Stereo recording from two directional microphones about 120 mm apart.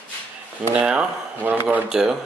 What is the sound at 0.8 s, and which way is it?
Speech, 10° right (ahead or behind).